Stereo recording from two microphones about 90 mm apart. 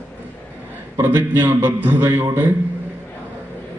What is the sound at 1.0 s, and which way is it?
A man's voice, 25° right (ahead or behind).